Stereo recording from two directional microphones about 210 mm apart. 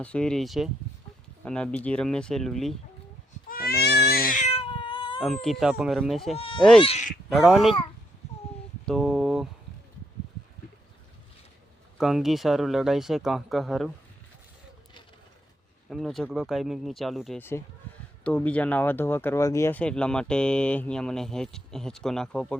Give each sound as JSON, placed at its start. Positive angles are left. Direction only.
{"t": 0.0, "sound": "speech", "side_deg": 5}
{"t": 3.5, "sound": "cat", "side_deg": 45}
{"t": 5.2, "sound": "speech", "side_deg": 0}
{"t": 6.3, "sound": "speech", "side_deg": 25}
{"t": 7.3, "sound": "speech", "side_deg": 0}
{"t": 8.9, "sound": "a sound", "side_deg": 0}
{"t": 11.9, "sound": "speech", "side_deg": 0}
{"t": 15.9, "sound": "speech", "side_deg": 0}